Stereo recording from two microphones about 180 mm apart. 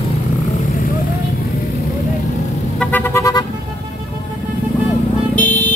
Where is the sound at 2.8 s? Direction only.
10° left (ahead or behind).